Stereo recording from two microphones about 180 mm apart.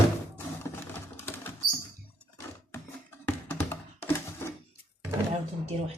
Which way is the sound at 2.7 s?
10° left (ahead or behind).